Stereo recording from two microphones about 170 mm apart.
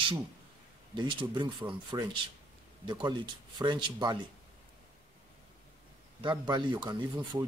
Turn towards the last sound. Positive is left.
turn(degrees=-25)  # may be behind; listen again after turning